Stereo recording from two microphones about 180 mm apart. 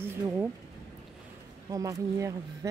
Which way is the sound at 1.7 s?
20° right (ahead or behind).